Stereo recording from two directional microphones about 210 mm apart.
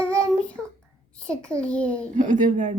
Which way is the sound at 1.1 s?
5° left (ahead or behind).